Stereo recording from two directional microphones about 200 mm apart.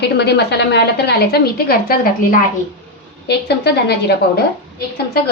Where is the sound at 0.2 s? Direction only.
55° left (ahead or behind).